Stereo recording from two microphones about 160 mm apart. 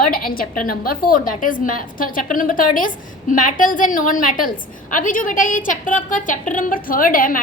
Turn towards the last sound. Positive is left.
turn(degrees=60)  # may be behind; listen again after turning